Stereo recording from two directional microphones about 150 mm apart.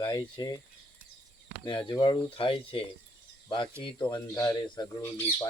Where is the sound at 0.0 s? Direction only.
25° left (ahead or behind).